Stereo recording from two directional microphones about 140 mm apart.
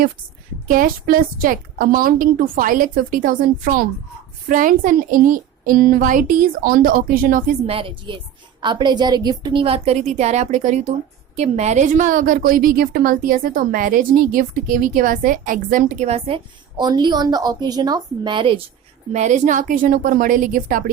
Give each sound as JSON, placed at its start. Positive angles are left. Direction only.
{"t": 0.7, "sound": "a woman's voice", "side_deg": -85}
{"t": 7.7, "sound": "a woman's voice", "side_deg": -40}
{"t": 16.0, "sound": "a woman's voice", "side_deg": -45}
{"t": 19.1, "sound": "a woman's voice", "side_deg": -55}